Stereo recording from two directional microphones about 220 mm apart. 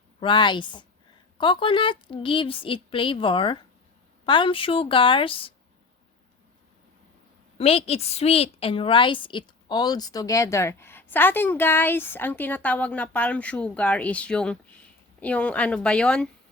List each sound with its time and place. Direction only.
0.2 s a woman's voice: 20° left (ahead or behind)
7.6 s a woman's voice: 25° left (ahead or behind); by 16.3 s 5° left (ahead or behind)